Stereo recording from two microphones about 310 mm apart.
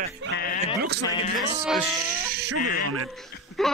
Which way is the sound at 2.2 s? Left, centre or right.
Right.